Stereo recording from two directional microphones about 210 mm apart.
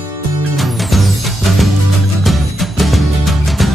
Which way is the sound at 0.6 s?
Centre (ahead or behind).